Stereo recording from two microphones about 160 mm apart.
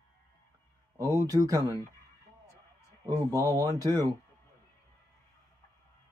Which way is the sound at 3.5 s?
25° right (ahead or behind).